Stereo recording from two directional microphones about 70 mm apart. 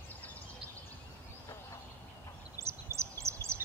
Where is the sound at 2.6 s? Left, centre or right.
Right.